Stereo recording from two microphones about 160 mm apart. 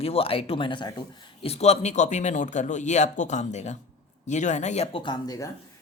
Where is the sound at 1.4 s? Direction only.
40° left (ahead or behind).